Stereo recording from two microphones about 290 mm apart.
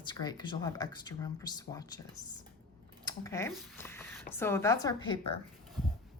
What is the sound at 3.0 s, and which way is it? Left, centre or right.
Speech, centre.